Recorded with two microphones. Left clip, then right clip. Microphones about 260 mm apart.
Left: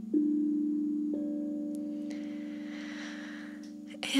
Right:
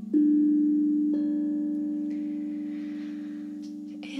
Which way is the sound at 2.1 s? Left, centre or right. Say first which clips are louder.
Right 7 dB; left.